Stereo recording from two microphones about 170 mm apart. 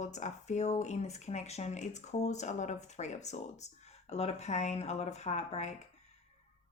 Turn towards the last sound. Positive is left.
turn(degrees=40)  # may be behind; listen again after turning